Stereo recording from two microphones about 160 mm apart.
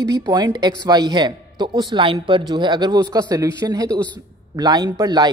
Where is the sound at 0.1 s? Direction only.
25° right (ahead or behind).